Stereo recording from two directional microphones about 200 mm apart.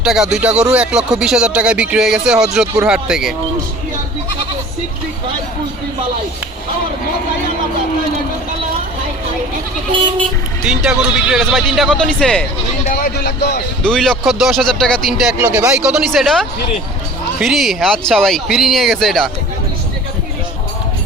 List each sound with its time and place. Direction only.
0.0 s speech: 5° right (ahead or behind)
9.9 s speech: 25° right (ahead or behind)
10.7 s speech: 5° right (ahead or behind)
12.9 s speech: 50° left (ahead or behind)
13.8 s speech: 5° left (ahead or behind)